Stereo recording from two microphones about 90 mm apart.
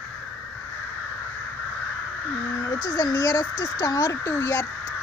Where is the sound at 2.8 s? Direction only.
45° left (ahead or behind).